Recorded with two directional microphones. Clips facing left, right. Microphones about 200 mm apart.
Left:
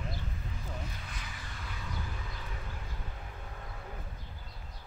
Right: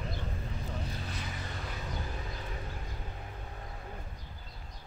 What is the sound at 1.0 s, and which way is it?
Vehicle, 35° right (ahead or behind).